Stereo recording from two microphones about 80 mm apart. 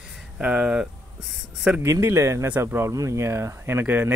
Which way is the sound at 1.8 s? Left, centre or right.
Right.